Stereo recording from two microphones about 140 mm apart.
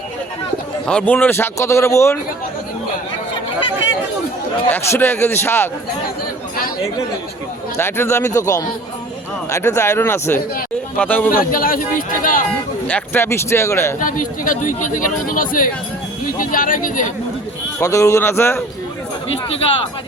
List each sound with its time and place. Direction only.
0.9 s speech: 10° left (ahead or behind)
4.7 s speech: 15° left (ahead or behind)
7.8 s speech: 15° left (ahead or behind)
11.3 s speech: 90° left
12.9 s speech: 15° left (ahead or behind)
14.0 s speech: 75° left (ahead or behind)
17.7 s speech: 20° left (ahead or behind)